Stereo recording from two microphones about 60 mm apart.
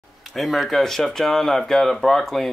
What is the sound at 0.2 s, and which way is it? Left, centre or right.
Speech, centre.